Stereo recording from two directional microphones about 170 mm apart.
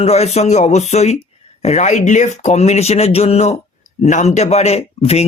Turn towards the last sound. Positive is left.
turn(degrees=35)  # may be behind; listen again after turning